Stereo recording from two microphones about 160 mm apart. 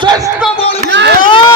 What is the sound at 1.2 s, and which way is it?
Speech, 30° left (ahead or behind).